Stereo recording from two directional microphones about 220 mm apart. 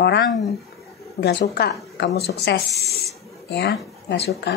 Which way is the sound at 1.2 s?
50° left (ahead or behind).